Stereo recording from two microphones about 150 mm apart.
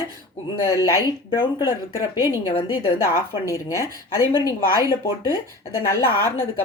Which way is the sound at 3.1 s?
20° left (ahead or behind).